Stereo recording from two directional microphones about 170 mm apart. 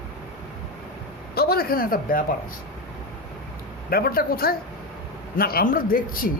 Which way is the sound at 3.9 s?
60° left (ahead or behind).